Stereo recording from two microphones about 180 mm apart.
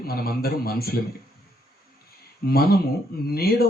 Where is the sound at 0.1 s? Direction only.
55° left (ahead or behind).